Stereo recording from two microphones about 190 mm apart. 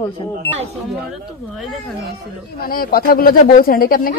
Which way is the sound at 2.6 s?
50° left (ahead or behind).